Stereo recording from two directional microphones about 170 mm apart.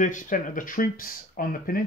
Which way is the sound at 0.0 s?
50° left (ahead or behind).